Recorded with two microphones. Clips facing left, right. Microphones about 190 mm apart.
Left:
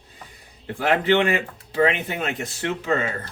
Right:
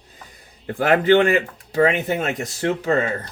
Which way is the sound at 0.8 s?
45° right (ahead or behind).